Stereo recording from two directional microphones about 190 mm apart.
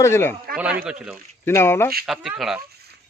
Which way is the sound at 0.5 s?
5° right (ahead or behind).